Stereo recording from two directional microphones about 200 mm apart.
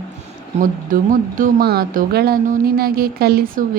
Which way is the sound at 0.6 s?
40° right (ahead or behind).